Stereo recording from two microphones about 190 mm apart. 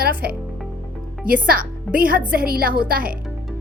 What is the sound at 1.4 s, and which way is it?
A woman's voice, 50° right (ahead or behind).